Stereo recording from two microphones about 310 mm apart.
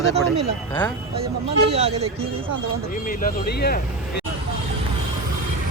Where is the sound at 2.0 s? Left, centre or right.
Centre.